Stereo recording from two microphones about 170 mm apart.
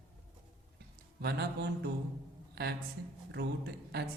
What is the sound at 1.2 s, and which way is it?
A man's voice, 75° right (ahead or behind).